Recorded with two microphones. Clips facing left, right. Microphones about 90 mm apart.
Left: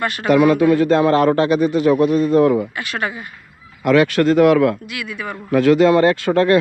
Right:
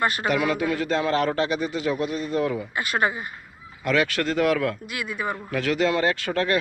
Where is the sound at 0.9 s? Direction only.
55° left (ahead or behind).